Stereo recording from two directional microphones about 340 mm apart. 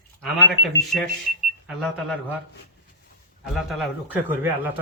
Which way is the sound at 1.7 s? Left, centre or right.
Centre.